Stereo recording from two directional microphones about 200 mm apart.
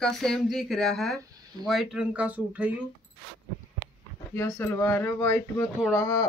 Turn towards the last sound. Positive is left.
turn(degrees=15)  # may be behind; listen again after turning